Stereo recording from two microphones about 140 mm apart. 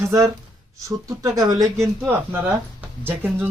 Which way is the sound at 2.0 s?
10° right (ahead or behind).